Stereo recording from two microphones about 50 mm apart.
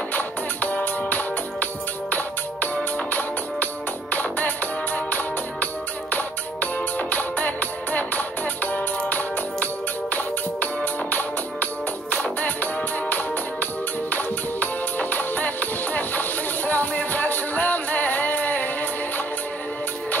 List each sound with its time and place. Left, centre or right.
0.1 s music: left
14.1 s music: left